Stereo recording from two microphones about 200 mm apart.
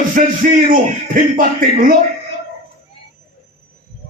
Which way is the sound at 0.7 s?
40° right (ahead or behind).